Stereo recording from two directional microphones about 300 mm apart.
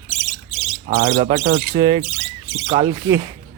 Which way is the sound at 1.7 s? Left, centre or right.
Centre.